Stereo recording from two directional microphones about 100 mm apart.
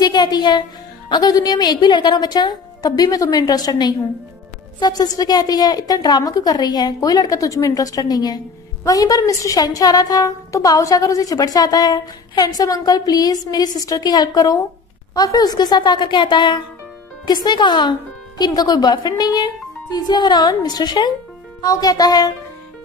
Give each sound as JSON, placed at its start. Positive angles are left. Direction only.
{"t": 0.0, "sound": "a woman's voice", "side_deg": 45}